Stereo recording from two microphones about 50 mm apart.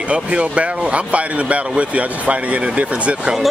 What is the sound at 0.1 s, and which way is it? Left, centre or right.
Speech, right.